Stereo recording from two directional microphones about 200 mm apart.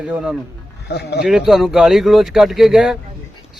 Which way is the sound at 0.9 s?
55° left (ahead or behind).